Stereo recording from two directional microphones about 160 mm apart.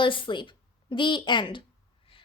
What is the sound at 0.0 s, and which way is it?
A woman's voice, 30° left (ahead or behind).